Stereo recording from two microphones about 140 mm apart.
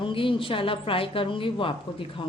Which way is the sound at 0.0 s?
40° left (ahead or behind).